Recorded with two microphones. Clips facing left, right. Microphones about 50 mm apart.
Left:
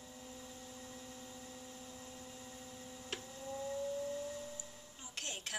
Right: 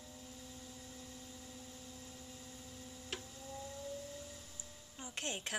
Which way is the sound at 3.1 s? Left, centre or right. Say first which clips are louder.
Left 1 dB; centre.